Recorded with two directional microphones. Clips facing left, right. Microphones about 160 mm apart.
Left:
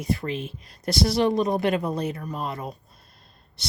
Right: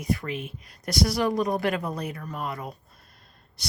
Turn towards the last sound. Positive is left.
turn(degrees=25)  # may be behind; listen again after turning